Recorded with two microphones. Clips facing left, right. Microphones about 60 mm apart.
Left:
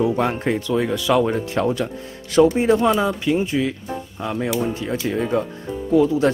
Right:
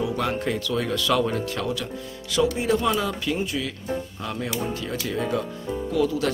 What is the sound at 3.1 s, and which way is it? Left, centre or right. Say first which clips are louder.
Speech: left 6 dB; centre.